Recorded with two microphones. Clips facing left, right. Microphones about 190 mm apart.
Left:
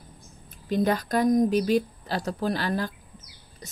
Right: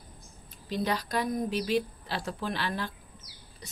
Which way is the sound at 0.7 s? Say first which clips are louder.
Left 7 dB; 50° left (ahead or behind).